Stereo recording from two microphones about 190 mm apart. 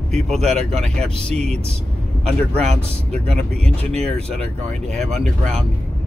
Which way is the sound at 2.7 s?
35° right (ahead or behind).